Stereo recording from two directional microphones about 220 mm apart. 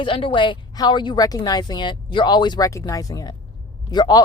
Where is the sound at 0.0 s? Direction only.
25° left (ahead or behind).